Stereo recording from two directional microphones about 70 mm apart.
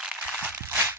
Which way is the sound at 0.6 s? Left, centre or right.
Right.